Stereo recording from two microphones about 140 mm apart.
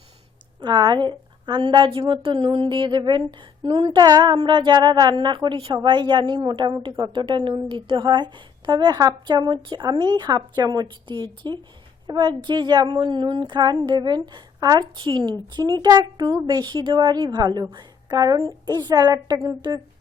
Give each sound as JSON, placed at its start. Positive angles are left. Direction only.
{"t": 0.6, "sound": "a woman's voice", "side_deg": -30}